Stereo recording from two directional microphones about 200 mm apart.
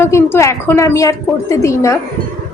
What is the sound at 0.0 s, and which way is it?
A woman's voice, 15° left (ahead or behind).